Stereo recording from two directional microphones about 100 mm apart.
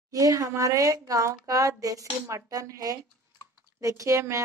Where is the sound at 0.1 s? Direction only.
35° right (ahead or behind).